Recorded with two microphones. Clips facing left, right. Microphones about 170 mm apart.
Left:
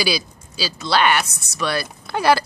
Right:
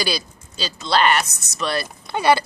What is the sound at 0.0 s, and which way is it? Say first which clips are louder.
Speech: left 2 dB; 5° left (ahead or behind).